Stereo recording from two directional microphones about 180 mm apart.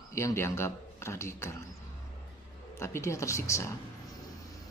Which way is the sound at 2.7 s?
15° left (ahead or behind).